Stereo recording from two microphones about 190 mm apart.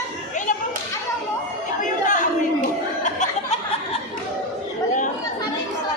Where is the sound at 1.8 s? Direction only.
40° left (ahead or behind).